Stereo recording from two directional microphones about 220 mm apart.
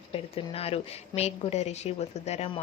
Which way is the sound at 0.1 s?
25° left (ahead or behind).